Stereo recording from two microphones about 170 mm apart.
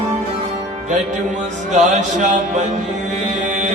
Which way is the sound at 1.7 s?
45° right (ahead or behind).